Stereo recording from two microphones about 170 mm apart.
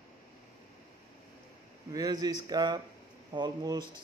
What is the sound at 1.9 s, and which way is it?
Speech, 20° right (ahead or behind).